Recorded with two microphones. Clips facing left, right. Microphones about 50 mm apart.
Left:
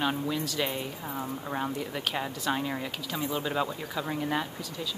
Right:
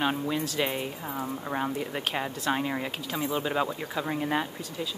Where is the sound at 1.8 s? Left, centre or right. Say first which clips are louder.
Right 1 dB; right.